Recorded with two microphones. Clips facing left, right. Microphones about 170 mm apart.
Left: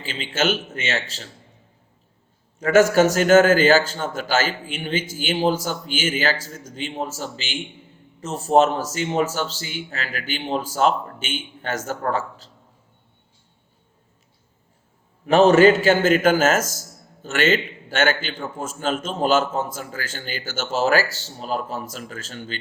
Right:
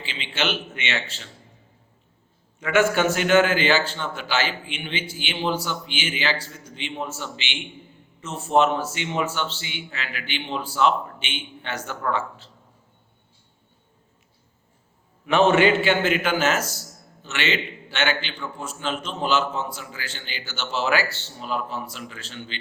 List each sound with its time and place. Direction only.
0.0 s a man's voice: 45° left (ahead or behind)
2.6 s a man's voice: 40° left (ahead or behind)
15.3 s a man's voice: 40° left (ahead or behind)